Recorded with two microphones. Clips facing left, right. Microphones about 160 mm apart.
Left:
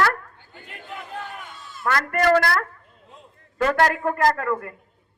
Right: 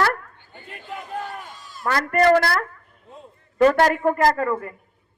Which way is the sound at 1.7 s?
35° right (ahead or behind).